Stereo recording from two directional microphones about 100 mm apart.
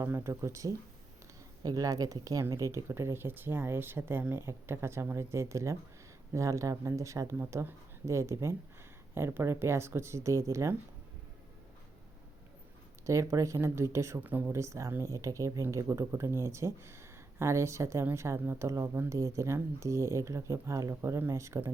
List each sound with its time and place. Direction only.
0.0 s speech: 25° right (ahead or behind)
13.1 s speech: 30° right (ahead or behind)
14.3 s speech: 20° right (ahead or behind)